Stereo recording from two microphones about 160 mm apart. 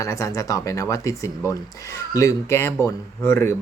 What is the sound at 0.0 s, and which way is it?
Speech, 20° left (ahead or behind).